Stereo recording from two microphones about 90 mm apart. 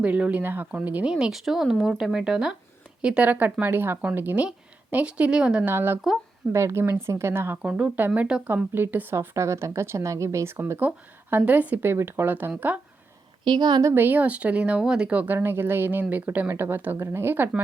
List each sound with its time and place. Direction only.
0.0 s speech: 15° right (ahead or behind)
1.1 s a woman's voice: 5° right (ahead or behind)
5.6 s speech: 25° right (ahead or behind)
7.6 s speech: 10° right (ahead or behind)
9.1 s speech: 30° right (ahead or behind)
13.4 s a woman's voice: 55° right (ahead or behind)
13.9 s speech: 20° right (ahead or behind)